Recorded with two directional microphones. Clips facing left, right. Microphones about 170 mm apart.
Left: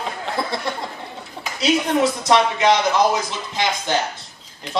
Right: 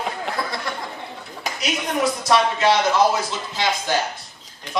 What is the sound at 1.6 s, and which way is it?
Speech, 25° left (ahead or behind).